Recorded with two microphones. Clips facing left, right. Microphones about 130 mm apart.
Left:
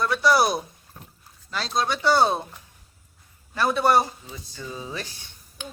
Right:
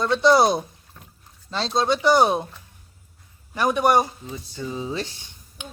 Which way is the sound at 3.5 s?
15° right (ahead or behind).